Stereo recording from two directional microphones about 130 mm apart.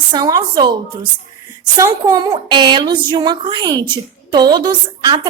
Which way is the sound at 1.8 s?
25° right (ahead or behind).